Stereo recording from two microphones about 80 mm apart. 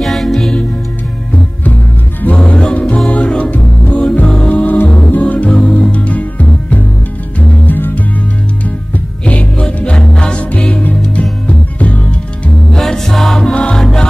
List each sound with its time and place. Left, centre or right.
0.0 s music: centre
1.3 s music: centre
4.0 s music: centre
9.2 s music: centre
12.7 s music: centre